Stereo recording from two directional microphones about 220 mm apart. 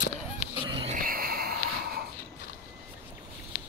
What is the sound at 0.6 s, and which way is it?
Dog, 20° right (ahead or behind).